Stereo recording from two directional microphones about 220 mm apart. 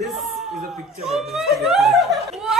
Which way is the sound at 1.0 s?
Centre (ahead or behind).